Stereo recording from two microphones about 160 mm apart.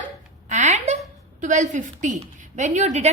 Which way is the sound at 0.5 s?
45° right (ahead or behind).